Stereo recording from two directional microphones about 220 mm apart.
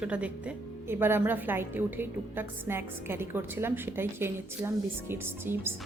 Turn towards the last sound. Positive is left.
turn(degrees=-10)  # may be behind; listen again after turning